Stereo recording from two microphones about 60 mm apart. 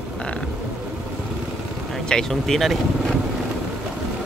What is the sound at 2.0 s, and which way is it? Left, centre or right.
Speech, centre.